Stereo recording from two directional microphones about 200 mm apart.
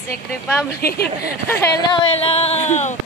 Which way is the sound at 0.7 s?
50° left (ahead or behind).